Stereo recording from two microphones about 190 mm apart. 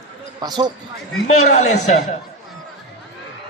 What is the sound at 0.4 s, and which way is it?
Speech, 20° right (ahead or behind).